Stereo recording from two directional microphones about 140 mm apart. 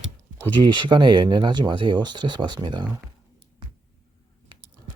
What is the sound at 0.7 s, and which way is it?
Speech, 35° right (ahead or behind).